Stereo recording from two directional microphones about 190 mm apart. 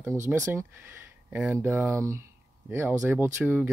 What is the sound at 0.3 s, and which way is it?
Speech, 15° right (ahead or behind).